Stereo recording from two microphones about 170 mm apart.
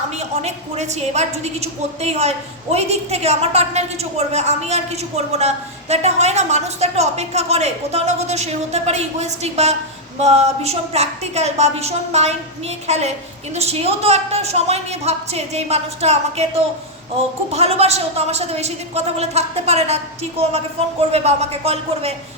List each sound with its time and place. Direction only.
0.2 s a woman's voice: 40° right (ahead or behind)
17.5 s a woman's voice: 40° right (ahead or behind)